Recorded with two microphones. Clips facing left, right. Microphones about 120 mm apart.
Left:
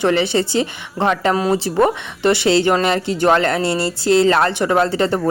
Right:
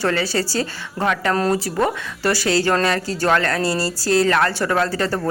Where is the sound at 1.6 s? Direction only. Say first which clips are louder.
Left 5 dB; 25° left (ahead or behind).